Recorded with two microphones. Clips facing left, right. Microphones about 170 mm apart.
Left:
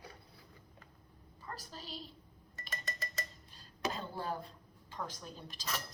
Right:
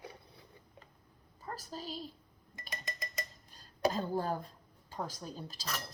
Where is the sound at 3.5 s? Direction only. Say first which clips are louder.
Right 7 dB; 40° right (ahead or behind).